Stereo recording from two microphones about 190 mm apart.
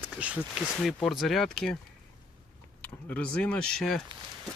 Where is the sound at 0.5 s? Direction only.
5° right (ahead or behind).